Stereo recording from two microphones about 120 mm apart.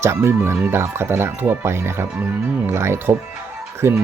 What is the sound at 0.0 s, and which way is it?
Speech, 20° right (ahead or behind).